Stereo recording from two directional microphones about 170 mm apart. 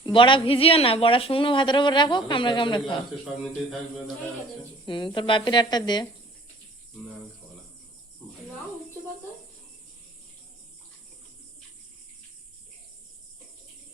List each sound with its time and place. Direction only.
0.0 s a woman's voice: 30° left (ahead or behind)
4.9 s a woman's voice: 30° left (ahead or behind)